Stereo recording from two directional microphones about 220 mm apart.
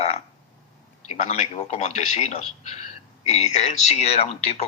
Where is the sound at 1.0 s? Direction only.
30° left (ahead or behind).